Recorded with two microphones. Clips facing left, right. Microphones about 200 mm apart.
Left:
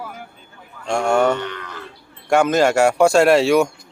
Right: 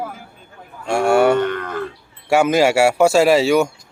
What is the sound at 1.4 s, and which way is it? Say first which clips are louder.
Livestock: right 9 dB; 50° right (ahead or behind).